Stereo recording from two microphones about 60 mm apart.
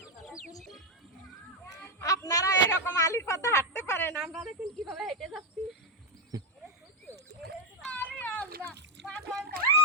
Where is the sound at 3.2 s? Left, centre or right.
Left.